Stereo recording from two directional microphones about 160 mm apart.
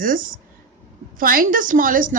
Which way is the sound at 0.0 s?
60° right (ahead or behind).